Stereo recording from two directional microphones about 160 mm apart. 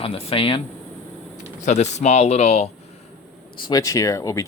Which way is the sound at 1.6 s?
45° left (ahead or behind).